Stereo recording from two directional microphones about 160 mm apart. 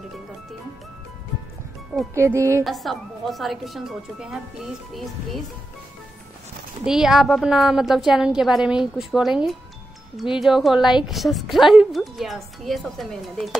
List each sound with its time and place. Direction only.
2.1 s music: 15° right (ahead or behind)
2.6 s a woman's voice: centre (ahead or behind)
6.8 s a woman's voice: 5° right (ahead or behind)